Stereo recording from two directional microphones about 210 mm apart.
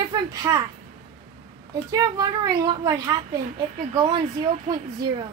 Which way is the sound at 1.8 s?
15° right (ahead or behind).